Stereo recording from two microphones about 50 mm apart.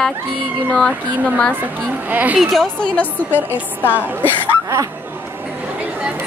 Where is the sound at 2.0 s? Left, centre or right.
Right.